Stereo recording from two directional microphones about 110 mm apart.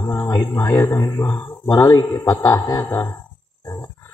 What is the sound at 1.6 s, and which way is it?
Speech, 35° left (ahead or behind).